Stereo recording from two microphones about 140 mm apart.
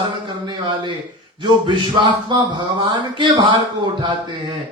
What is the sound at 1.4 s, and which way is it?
Speech, 35° right (ahead or behind).